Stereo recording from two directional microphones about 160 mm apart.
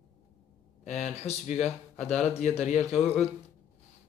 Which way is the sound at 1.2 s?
40° left (ahead or behind).